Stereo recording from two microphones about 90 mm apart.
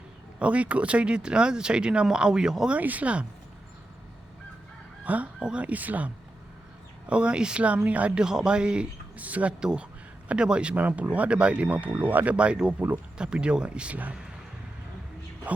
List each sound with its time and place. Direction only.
0.3 s speech: 15° right (ahead or behind)
5.0 s speech: 15° right (ahead or behind)
7.1 s speech: 10° right (ahead or behind)
15.5 s speech: 15° right (ahead or behind)